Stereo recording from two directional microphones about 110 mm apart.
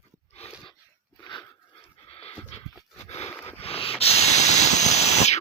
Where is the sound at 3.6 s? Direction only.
60° left (ahead or behind); by 5.4 s 90° left.